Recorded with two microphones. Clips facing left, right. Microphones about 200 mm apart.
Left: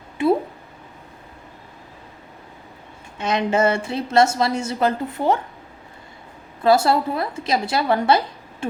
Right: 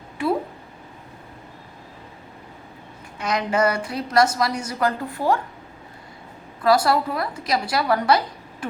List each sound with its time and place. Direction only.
0.2 s a sound: 20° left (ahead or behind)
3.2 s a woman's voice: 25° left (ahead or behind)
6.6 s a woman's voice: 25° left (ahead or behind)